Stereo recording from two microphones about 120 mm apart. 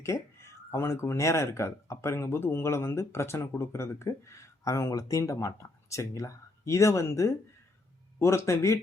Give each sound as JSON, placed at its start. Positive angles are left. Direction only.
{"t": 0.0, "sound": "speech", "side_deg": 25}